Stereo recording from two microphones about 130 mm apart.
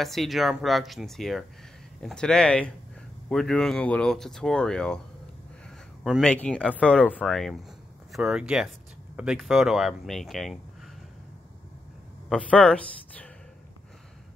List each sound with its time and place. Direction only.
0.0 s speech: centre (ahead or behind)
6.2 s speech: 10° left (ahead or behind)
12.3 s speech: 10° left (ahead or behind)